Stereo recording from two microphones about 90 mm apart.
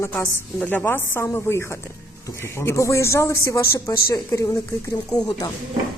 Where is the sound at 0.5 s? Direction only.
20° left (ahead or behind); by 5.0 s 40° left (ahead or behind).